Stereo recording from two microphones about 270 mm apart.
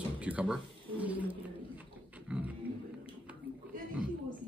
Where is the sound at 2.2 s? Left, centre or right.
Centre.